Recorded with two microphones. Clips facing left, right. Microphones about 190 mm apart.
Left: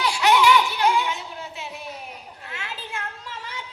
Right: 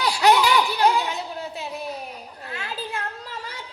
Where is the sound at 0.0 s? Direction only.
35° right (ahead or behind).